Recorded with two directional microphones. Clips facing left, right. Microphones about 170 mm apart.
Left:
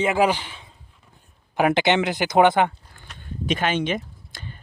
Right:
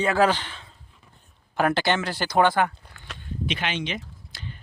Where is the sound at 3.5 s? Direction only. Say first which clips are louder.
Left 7 dB; 45° left (ahead or behind).